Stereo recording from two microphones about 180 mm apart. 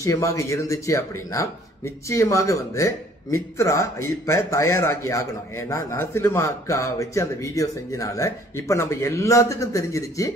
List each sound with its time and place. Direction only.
0.0 s a man's voice: 15° left (ahead or behind)